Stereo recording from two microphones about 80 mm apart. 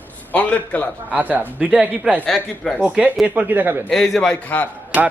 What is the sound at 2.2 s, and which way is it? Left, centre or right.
Speech, centre.